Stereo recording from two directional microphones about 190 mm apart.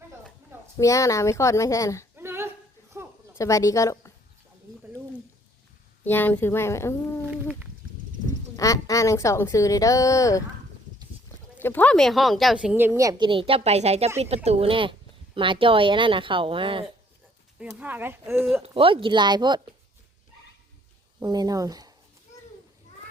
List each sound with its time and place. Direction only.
0.8 s a woman's voice: 15° left (ahead or behind)
2.1 s a sound: 10° right (ahead or behind)
3.3 s a woman's voice: 15° left (ahead or behind)
6.1 s a woman's voice: 10° left (ahead or behind)
7.3 s a sound: 5° right (ahead or behind)
8.5 s a woman's voice: 15° left (ahead or behind)
11.5 s speech: 10° left (ahead or behind)
13.0 s a woman's voice: 20° right (ahead or behind)
17.6 s speech: 10° right (ahead or behind)
18.6 s speech: 30° right (ahead or behind)
21.2 s speech: 20° right (ahead or behind)